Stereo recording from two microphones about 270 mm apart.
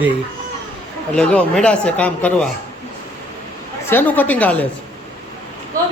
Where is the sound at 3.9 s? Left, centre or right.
Centre.